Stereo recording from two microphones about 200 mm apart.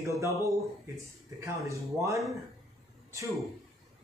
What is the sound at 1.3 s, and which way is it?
Speech, 15° right (ahead or behind).